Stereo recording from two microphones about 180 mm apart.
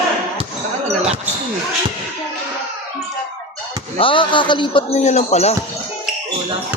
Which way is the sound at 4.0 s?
30° left (ahead or behind).